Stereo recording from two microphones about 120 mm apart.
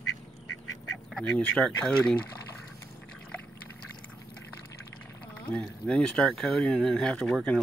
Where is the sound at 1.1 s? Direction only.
10° left (ahead or behind).